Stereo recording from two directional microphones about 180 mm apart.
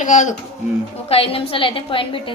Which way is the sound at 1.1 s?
30° left (ahead or behind).